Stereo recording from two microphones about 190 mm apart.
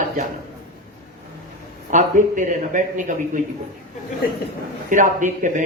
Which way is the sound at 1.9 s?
40° right (ahead or behind).